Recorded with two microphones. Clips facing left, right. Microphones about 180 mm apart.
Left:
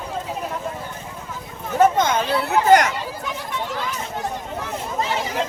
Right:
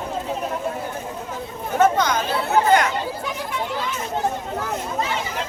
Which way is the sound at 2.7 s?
45° left (ahead or behind).